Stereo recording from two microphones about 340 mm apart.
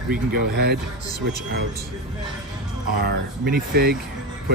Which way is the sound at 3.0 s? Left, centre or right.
Right.